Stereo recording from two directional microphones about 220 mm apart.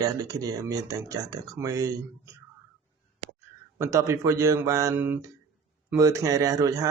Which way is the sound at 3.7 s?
10° right (ahead or behind).